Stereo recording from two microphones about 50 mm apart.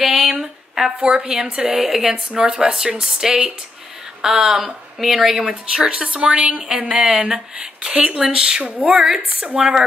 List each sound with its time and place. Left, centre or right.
0.4 s a sound: centre
0.9 s a woman's voice: right
1.8 s speech: centre
5.5 s a woman's voice: centre
7.9 s a woman's voice: right